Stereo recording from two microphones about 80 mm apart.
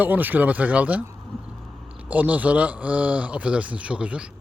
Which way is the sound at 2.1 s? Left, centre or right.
Centre.